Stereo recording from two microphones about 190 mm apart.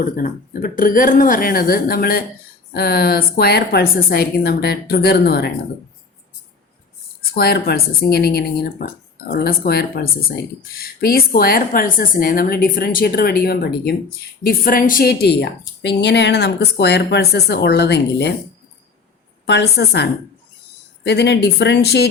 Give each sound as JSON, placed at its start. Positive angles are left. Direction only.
{"t": 0.0, "sound": "a woman's voice", "side_deg": 45}
{"t": 7.2, "sound": "a woman's voice", "side_deg": 55}
{"t": 19.5, "sound": "a woman's voice", "side_deg": 60}
{"t": 21.1, "sound": "a woman's voice", "side_deg": 65}